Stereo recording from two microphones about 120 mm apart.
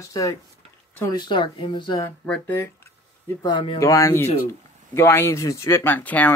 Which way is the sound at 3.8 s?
25° left (ahead or behind).